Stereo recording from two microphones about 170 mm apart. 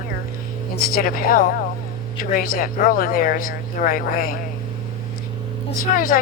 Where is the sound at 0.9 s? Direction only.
55° left (ahead or behind).